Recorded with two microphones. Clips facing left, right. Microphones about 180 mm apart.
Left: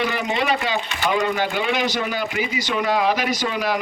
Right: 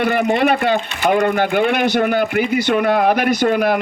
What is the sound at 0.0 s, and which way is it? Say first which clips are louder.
A man's voice: right 7 dB; 55° right (ahead or behind).